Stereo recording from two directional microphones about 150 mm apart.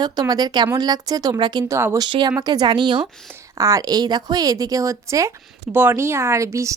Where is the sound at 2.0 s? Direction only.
35° right (ahead or behind).